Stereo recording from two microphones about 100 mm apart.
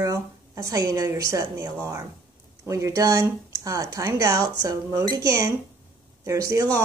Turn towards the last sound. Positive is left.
turn(degrees=-35)  # may be behind; listen again after turning